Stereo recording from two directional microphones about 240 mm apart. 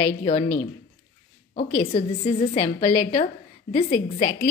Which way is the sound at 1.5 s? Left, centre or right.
Left.